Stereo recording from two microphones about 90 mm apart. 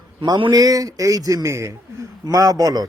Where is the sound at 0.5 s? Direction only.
40° right (ahead or behind).